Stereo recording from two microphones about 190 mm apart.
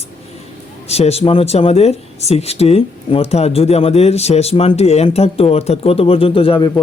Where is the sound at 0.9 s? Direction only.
35° left (ahead or behind).